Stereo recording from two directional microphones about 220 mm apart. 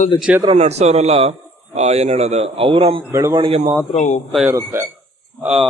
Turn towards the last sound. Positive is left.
turn(degrees=-5)  # may be behind; listen again after turning